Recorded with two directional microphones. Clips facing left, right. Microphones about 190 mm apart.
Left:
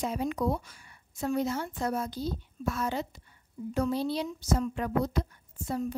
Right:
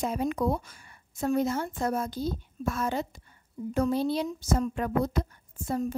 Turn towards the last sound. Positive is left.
turn(degrees=-50)  # may be behind; listen again after turning